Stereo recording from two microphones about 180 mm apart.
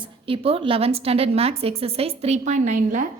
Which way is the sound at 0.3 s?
30° right (ahead or behind).